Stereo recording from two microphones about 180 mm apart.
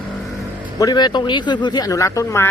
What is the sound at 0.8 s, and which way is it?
Speech, 20° left (ahead or behind).